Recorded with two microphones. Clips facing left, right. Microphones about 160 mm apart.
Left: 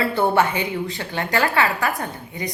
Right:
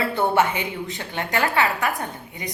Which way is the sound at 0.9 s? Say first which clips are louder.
Left 1 dB; 20° right (ahead or behind).